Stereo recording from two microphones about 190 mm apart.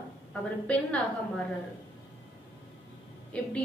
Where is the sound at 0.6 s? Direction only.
5° left (ahead or behind).